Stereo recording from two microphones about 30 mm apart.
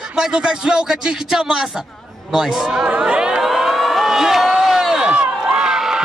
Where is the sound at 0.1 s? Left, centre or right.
Right.